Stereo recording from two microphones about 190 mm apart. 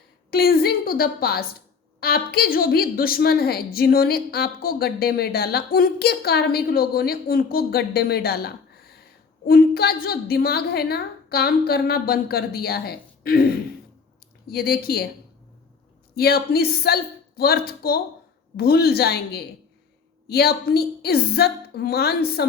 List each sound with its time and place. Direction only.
0.3 s a woman's voice: 50° left (ahead or behind)
16.1 s a woman's voice: 55° left (ahead or behind)